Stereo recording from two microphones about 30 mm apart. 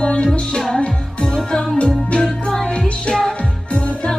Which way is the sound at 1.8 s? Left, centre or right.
Left.